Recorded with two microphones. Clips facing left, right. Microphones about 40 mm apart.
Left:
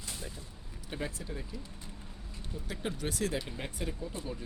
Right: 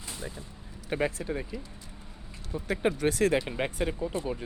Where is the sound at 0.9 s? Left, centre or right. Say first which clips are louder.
Right 9 dB; right.